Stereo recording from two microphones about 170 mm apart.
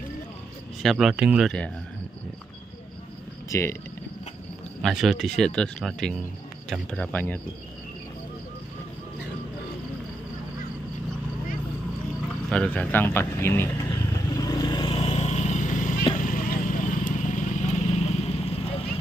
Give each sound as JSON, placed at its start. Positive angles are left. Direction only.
{"t": 0.8, "sound": "speech", "side_deg": 0}
{"t": 3.4, "sound": "speech", "side_deg": 15}
{"t": 4.8, "sound": "speech", "side_deg": 0}
{"t": 12.4, "sound": "speech", "side_deg": 5}
{"t": 14.3, "sound": "vehicle", "side_deg": 20}